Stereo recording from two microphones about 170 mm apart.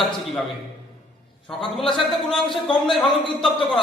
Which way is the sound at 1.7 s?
Centre (ahead or behind).